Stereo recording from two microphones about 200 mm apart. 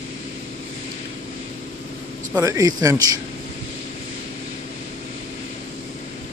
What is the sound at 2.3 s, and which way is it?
Speech, 15° right (ahead or behind).